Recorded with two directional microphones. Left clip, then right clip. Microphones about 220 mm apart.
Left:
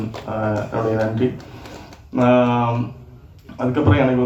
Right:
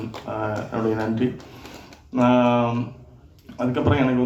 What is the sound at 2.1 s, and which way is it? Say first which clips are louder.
Speech: left 3 dB; 50° right (ahead or behind).